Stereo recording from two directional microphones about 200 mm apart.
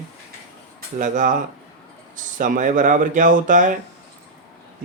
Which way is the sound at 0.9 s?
40° right (ahead or behind).